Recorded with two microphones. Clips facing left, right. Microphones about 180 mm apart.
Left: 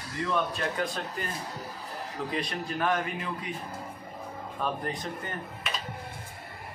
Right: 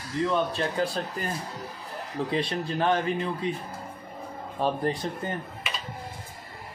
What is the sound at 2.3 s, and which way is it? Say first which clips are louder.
Speech: right 5 dB; 30° right (ahead or behind).